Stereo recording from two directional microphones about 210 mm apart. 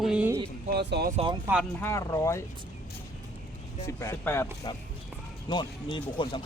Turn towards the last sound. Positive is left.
turn(degrees=25)  # may be behind; listen again after turning